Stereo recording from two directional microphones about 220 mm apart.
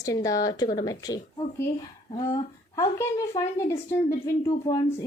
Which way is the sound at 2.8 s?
15° left (ahead or behind).